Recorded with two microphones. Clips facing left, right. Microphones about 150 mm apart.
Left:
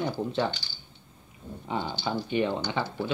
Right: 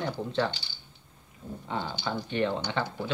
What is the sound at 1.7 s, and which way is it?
Speech, 20° left (ahead or behind).